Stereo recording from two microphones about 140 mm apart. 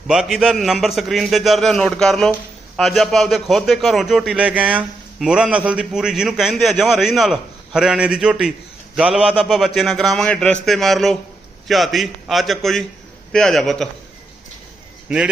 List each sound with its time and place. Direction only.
0.1 s a man's voice: 5° right (ahead or behind)
15.1 s a man's voice: 5° right (ahead or behind)